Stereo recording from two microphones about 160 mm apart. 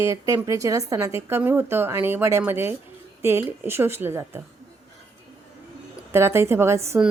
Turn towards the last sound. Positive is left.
turn(degrees=-15)  # may be behind; listen again after turning